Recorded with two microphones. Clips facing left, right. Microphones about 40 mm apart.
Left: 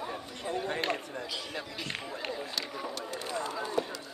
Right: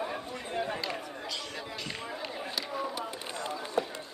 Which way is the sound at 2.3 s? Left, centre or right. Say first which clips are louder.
Left 1 dB; right.